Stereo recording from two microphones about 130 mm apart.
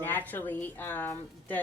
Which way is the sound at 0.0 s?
15° left (ahead or behind).